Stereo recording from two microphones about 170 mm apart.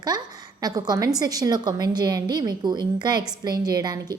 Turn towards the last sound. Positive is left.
turn(degrees=-25)  # may be behind; listen again after turning